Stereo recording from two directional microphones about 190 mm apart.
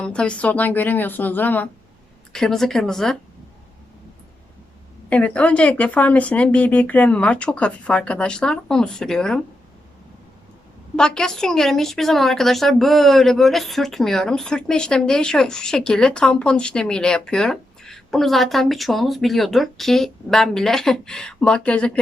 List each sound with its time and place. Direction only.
0.0 s a woman's voice: 5° left (ahead or behind)
5.0 s speech: 5° left (ahead or behind)
10.9 s a woman's voice: 5° left (ahead or behind)